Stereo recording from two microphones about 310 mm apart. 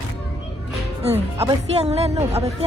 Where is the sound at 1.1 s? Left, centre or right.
Centre.